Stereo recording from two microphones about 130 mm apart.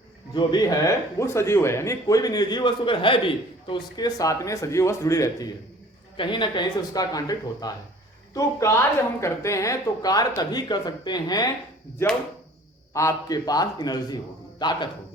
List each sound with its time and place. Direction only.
0.3 s speech: 30° left (ahead or behind)
6.1 s speech: 40° left (ahead or behind)
12.9 s a man's voice: 25° left (ahead or behind)